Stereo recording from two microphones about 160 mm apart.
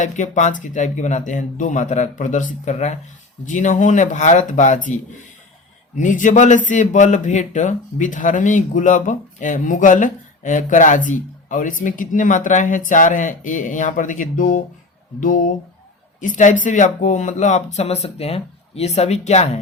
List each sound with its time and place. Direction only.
0.0 s a man's voice: 50° left (ahead or behind)
6.0 s a man's voice: 55° left (ahead or behind)